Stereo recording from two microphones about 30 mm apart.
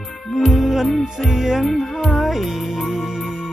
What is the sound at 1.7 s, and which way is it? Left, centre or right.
Music, centre.